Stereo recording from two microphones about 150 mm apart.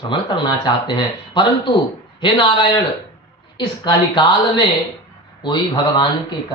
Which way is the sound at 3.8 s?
30° left (ahead or behind).